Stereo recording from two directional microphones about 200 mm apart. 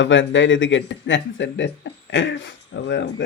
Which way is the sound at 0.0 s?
70° left (ahead or behind).